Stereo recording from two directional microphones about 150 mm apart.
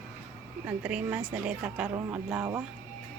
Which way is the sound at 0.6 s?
10° right (ahead or behind).